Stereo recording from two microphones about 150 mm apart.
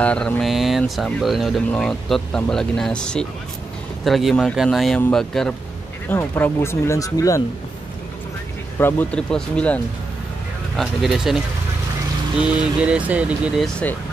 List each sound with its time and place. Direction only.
0.0 s speech: 10° left (ahead or behind)
6.0 s speech: 15° left (ahead or behind)
8.7 s speech: 15° left (ahead or behind)
10.8 s speech: centre (ahead or behind)
12.4 s speech: 5° right (ahead or behind)